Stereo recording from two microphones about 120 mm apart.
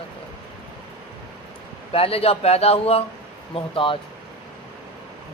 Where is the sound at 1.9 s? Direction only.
55° left (ahead or behind).